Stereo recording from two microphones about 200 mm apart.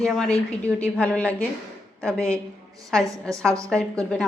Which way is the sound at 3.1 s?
15° right (ahead or behind).